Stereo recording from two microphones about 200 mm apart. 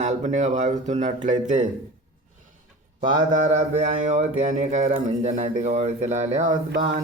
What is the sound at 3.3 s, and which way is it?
Speech, 35° right (ahead or behind).